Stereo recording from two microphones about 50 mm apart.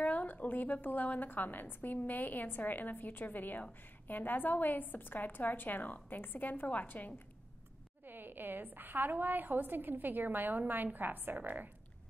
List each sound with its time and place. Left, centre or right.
0.0 s a woman's voice: left
8.0 s a woman's voice: right